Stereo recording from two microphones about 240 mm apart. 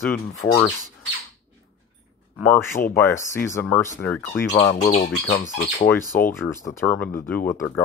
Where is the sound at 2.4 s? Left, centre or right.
Centre.